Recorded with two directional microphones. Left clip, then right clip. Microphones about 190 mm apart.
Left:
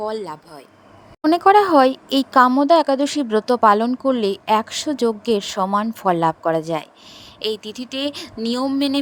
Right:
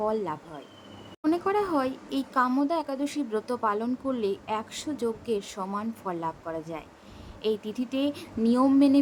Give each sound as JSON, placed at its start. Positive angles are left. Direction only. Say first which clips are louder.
{"t": 0.0, "sound": "speech", "louder": "left 3 dB", "side_deg": 40}